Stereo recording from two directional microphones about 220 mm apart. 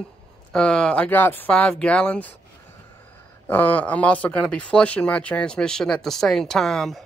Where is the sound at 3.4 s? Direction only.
10° left (ahead or behind).